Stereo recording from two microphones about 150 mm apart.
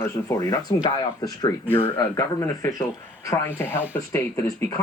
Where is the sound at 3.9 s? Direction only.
15° left (ahead or behind).